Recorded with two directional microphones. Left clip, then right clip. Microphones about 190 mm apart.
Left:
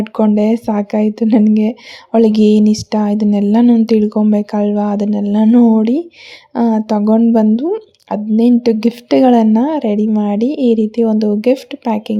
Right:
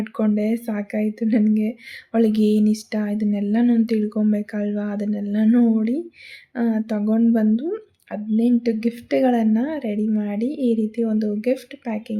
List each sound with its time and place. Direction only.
0.0 s speech: 30° left (ahead or behind)
6.5 s speech: 30° left (ahead or behind)